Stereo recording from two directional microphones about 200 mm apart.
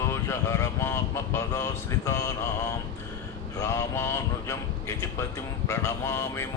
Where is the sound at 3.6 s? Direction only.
15° left (ahead or behind).